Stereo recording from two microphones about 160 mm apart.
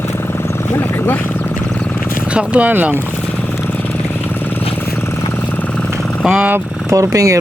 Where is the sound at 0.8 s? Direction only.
10° left (ahead or behind).